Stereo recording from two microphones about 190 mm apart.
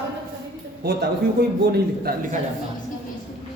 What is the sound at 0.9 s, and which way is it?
A man's voice, 60° right (ahead or behind).